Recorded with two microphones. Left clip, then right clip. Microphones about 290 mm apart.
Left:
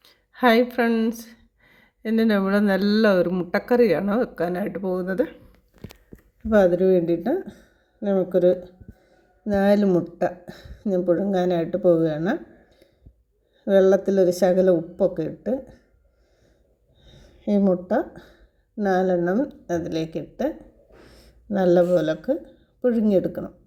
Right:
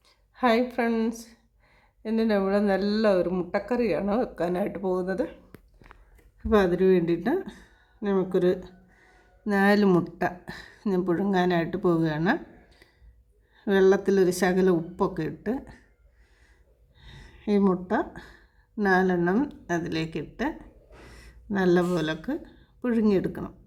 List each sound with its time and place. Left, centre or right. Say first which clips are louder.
0.0 s speech: left 5 dB; centre
9.6 s speech: left 2 dB; centre
13.7 s speech: left 4 dB; centre
17.0 s a sound: left 3 dB; centre
18.9 s speech: left 2 dB; centre